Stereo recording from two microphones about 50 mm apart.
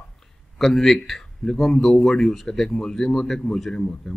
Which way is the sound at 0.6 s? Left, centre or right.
Centre.